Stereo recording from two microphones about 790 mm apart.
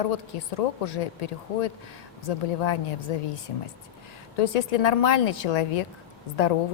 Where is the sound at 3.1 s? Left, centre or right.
Left.